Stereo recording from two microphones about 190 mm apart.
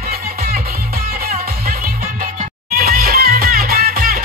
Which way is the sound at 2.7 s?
50° right (ahead or behind).